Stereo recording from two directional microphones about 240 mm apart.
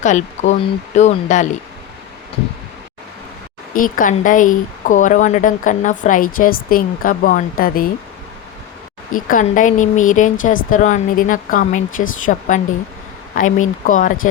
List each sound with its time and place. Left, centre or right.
0.0 s speech: left
3.8 s speech: left
9.1 s speech: left